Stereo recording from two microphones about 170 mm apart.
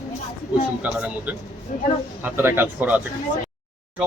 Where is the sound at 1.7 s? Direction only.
50° left (ahead or behind).